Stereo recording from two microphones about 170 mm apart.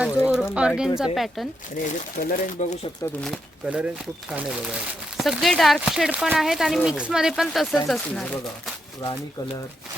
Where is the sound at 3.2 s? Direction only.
Centre (ahead or behind).